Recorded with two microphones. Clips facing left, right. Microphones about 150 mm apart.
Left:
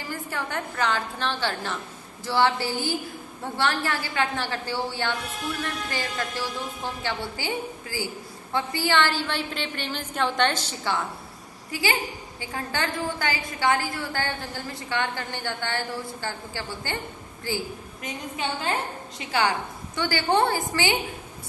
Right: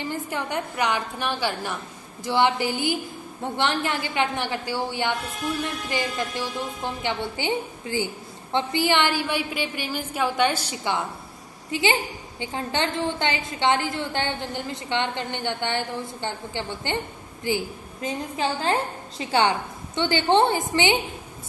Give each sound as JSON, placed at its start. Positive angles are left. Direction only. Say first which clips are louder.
{"t": 0.1, "sound": "a woman's voice", "louder": "left 1 dB", "side_deg": -20}
{"t": 18.0, "sound": "a woman's voice", "louder": "right 5 dB", "side_deg": -30}